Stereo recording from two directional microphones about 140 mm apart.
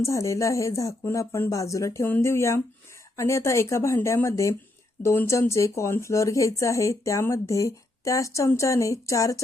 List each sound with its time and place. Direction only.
0.0 s speech: 20° left (ahead or behind)